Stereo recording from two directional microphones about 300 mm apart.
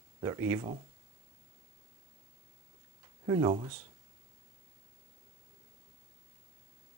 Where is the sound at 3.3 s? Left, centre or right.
Centre.